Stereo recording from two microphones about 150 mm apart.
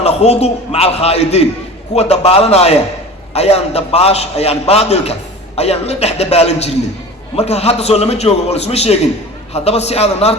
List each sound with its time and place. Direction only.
0.0 s a man's voice: 45° left (ahead or behind)